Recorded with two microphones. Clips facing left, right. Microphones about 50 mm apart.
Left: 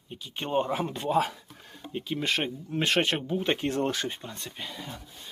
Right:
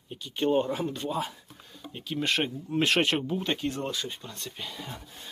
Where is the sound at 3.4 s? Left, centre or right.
Left.